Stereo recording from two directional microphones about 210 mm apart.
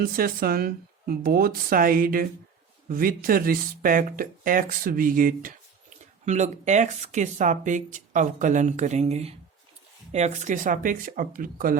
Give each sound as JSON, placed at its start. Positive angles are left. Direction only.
{"t": 0.0, "sound": "speech", "side_deg": -45}